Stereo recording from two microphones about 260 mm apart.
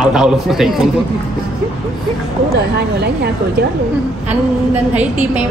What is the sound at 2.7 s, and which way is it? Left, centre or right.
Speech, right.